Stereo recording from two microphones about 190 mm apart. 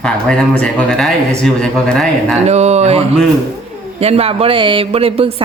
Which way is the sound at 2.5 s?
35° right (ahead or behind).